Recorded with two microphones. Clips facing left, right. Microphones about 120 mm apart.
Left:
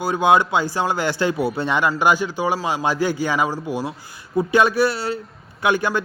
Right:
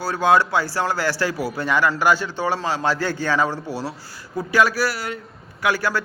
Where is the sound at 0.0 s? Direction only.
20° left (ahead or behind).